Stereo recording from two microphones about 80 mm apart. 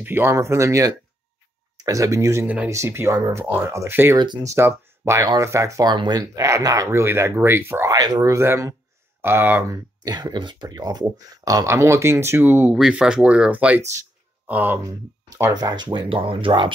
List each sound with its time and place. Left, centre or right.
0.0 s speech: right
0.3 s speech: right
2.4 s speech: centre
2.7 s speech: right
4.4 s speech: right
5.9 s speech: right
6.2 s speech: right
6.9 s speech: right
7.9 s speech: right
8.3 s speech: right
9.6 s speech: right
10.1 s speech: right
12.7 s speech: centre
14.9 s speech: right